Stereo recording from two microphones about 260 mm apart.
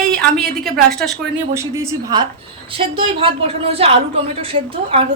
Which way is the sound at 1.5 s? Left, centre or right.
Centre.